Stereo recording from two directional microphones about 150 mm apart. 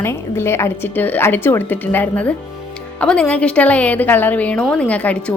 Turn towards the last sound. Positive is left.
turn(degrees=10)  # may be behind; listen again after turning